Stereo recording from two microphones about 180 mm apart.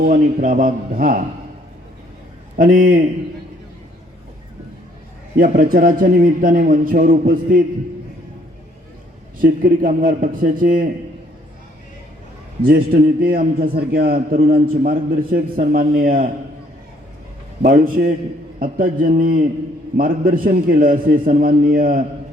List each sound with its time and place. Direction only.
0.0 s a man's voice: 55° right (ahead or behind)
2.6 s a man's voice: 50° right (ahead or behind)
5.4 s a man's voice: 50° right (ahead or behind)
9.4 s a man's voice: 50° right (ahead or behind)
12.6 s a man's voice: 55° right (ahead or behind)
17.6 s a man's voice: 50° right (ahead or behind)